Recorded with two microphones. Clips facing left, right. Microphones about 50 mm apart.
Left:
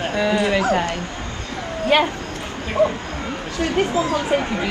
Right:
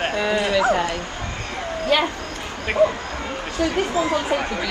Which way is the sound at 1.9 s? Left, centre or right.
Left.